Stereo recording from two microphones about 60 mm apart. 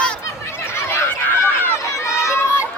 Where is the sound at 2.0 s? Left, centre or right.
Left.